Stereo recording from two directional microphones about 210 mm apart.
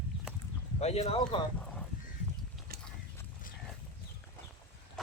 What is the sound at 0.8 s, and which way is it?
Speech, 30° left (ahead or behind).